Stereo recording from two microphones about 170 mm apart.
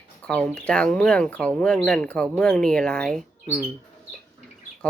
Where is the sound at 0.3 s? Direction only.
5° left (ahead or behind).